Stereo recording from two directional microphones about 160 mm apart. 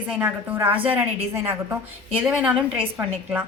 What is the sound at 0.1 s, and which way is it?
A woman's voice, 10° right (ahead or behind).